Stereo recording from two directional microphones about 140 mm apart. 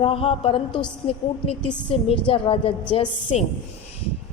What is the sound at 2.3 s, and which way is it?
A woman's voice, 40° left (ahead or behind).